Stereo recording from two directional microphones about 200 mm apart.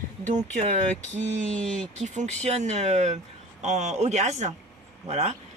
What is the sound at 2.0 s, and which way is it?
Speech, 35° right (ahead or behind).